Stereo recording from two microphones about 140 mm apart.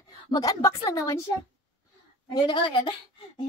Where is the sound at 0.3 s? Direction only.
25° left (ahead or behind).